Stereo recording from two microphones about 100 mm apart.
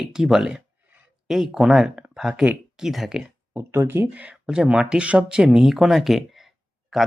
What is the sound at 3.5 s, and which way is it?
Speech, 25° right (ahead or behind).